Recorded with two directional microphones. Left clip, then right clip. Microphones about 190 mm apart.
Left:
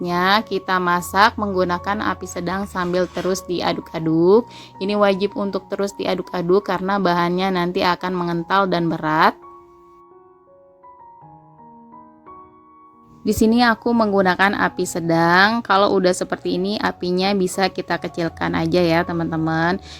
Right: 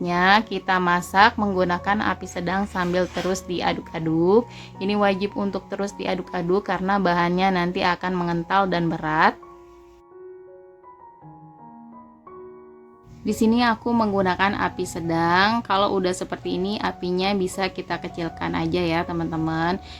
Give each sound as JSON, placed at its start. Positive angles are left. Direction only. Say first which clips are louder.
{"t": 0.0, "sound": "a woman's voice", "louder": "even", "side_deg": 25}
{"t": 13.2, "sound": "speech", "louder": "left 4 dB", "side_deg": 35}